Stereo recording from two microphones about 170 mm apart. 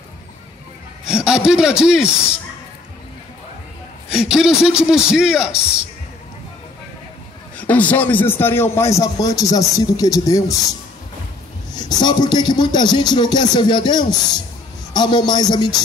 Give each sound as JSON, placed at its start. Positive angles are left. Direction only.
{"t": 1.0, "sound": "a man's voice", "side_deg": -5}
{"t": 4.1, "sound": "a man's voice", "side_deg": -5}
{"t": 7.5, "sound": "a man's voice", "side_deg": 10}
{"t": 11.7, "sound": "speech", "side_deg": 25}